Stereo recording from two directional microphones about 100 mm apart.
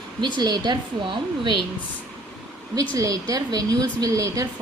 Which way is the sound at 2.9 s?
35° right (ahead or behind).